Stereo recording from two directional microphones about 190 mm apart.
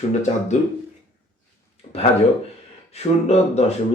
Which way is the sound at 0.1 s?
35° left (ahead or behind).